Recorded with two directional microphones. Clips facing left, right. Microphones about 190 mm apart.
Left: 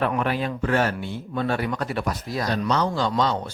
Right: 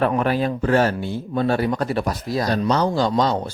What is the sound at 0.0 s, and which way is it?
Speech, 40° right (ahead or behind).